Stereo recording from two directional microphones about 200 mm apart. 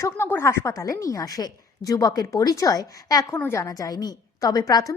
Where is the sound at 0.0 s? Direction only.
10° left (ahead or behind).